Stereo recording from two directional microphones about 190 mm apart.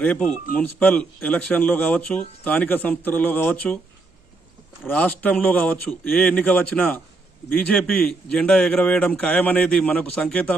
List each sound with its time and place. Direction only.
0.0 s a man's voice: 10° left (ahead or behind)
4.9 s a man's voice: 10° left (ahead or behind)